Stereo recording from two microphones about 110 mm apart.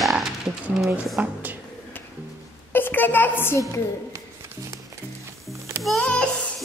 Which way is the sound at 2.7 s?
20° left (ahead or behind).